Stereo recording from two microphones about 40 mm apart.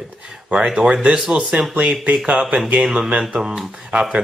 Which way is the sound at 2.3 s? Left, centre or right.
Right.